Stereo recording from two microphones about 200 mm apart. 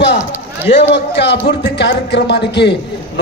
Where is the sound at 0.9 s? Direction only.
60° left (ahead or behind).